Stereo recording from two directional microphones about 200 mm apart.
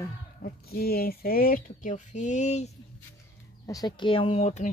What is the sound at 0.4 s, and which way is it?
Speech, 50° left (ahead or behind).